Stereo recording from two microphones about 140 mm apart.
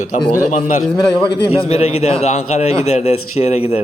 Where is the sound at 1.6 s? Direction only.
50° left (ahead or behind).